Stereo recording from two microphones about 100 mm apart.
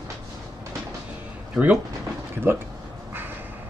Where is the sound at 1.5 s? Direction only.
15° right (ahead or behind).